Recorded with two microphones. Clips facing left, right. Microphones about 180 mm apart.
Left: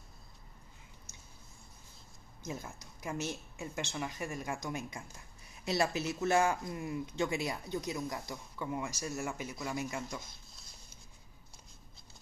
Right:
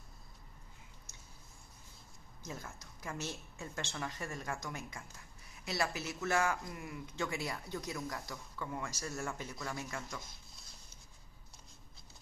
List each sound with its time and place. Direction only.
2.4 s a woman's voice: 15° left (ahead or behind)